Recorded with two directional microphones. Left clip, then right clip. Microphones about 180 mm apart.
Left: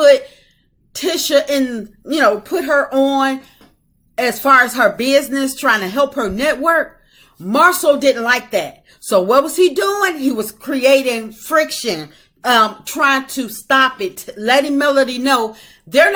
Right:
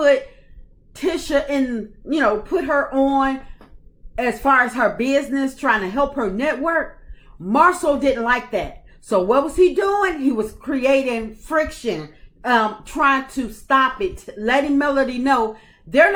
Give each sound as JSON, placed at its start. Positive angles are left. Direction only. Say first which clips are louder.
{"t": 0.9, "sound": "a woman's voice", "louder": "left 5 dB", "side_deg": 10}